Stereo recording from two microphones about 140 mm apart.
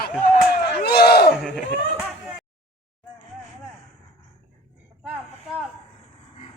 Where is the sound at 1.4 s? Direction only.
5° right (ahead or behind).